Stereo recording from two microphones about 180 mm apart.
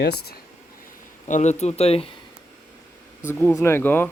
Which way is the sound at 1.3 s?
40° left (ahead or behind).